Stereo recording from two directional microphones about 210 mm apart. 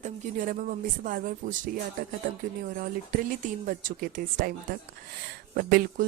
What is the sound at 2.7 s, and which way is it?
Speech, 40° right (ahead or behind).